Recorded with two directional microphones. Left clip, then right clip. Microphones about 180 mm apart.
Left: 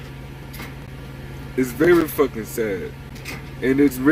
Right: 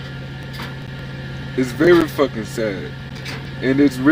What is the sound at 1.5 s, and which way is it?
Speech, centre (ahead or behind).